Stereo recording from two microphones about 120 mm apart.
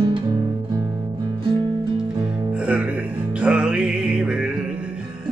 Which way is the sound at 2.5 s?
10° right (ahead or behind).